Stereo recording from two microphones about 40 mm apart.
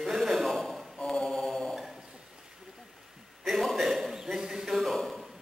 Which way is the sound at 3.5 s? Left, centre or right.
Centre.